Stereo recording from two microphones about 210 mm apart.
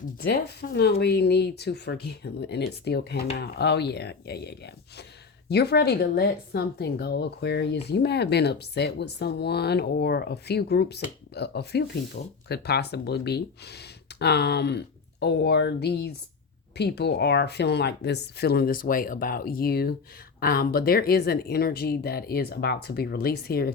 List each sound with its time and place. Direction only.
0.2 s speech: 50° left (ahead or behind)